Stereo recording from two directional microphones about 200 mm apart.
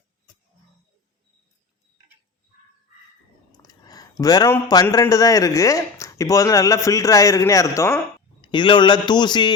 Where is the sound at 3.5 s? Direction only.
20° left (ahead or behind).